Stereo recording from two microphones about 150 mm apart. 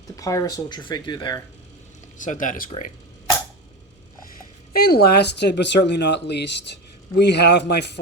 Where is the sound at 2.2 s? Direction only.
60° left (ahead or behind).